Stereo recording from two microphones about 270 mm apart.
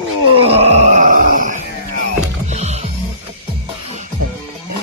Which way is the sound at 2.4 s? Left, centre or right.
Right.